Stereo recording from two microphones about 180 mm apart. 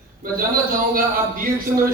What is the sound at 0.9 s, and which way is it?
Speech, 50° right (ahead or behind).